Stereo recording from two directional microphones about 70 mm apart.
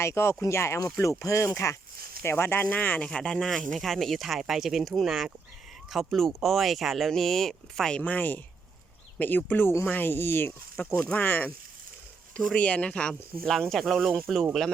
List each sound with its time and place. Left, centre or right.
0.0 s speech: left
2.2 s speech: left
3.1 s speech: centre
7.9 s speech: left
12.5 s speech: centre